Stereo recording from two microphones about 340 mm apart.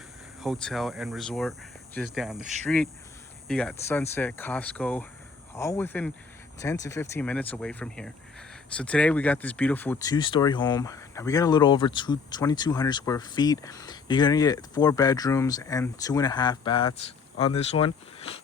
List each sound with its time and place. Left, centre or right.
0.4 s speech: centre